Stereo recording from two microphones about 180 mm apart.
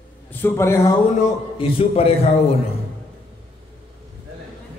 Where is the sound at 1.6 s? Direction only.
30° left (ahead or behind).